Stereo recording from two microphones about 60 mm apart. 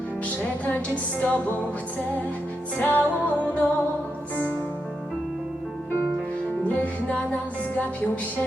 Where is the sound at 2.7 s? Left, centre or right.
Left.